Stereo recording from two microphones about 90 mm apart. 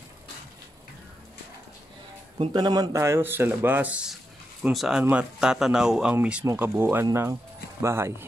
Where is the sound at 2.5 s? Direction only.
50° right (ahead or behind).